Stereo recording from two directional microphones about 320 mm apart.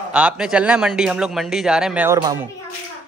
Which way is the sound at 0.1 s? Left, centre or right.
Centre.